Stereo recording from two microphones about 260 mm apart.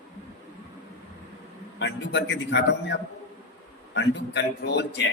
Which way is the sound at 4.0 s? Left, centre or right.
Left.